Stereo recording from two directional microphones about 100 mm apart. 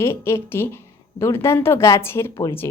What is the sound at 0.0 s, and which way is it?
A woman's voice, 25° left (ahead or behind).